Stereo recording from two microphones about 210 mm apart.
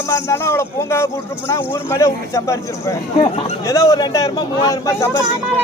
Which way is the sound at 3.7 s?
15° left (ahead or behind).